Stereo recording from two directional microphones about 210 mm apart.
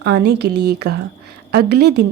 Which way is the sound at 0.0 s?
55° right (ahead or behind).